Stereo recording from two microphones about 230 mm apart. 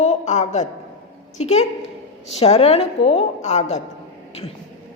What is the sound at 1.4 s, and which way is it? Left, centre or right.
A woman's voice, left.